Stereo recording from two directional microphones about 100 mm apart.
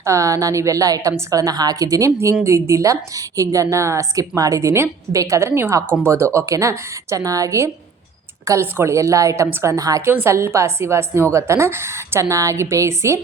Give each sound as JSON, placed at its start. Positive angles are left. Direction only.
{"t": 0.0, "sound": "a woman's voice", "side_deg": -30}
{"t": 10.1, "sound": "a woman's voice", "side_deg": -25}